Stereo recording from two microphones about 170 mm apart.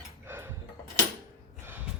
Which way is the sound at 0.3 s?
15° right (ahead or behind).